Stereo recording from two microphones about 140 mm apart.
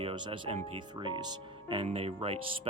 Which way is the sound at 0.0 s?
40° right (ahead or behind).